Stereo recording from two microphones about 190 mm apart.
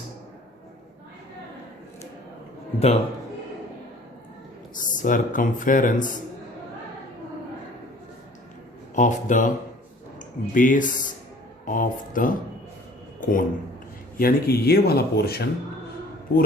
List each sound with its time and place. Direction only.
2.7 s speech: 35° left (ahead or behind)
4.7 s speech: 45° left (ahead or behind)
9.0 s speech: 40° left (ahead or behind)